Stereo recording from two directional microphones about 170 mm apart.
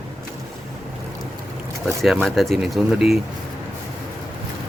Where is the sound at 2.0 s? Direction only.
Centre (ahead or behind).